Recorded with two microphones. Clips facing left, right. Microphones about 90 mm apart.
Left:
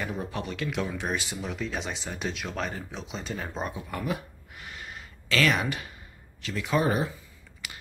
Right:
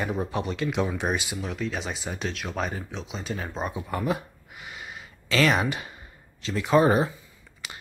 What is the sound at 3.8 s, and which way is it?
Speech, 30° right (ahead or behind).